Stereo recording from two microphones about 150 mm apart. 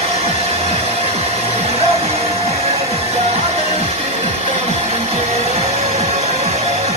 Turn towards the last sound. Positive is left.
turn(degrees=-45)  # may be behind; listen again after turning